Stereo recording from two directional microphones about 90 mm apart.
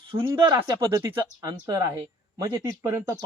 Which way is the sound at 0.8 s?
35° right (ahead or behind).